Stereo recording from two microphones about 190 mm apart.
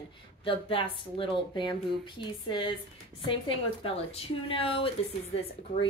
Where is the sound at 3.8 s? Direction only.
30° left (ahead or behind).